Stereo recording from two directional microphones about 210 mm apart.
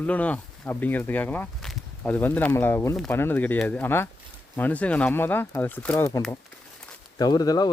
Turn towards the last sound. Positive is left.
turn(degrees=20)  # may be behind; listen again after turning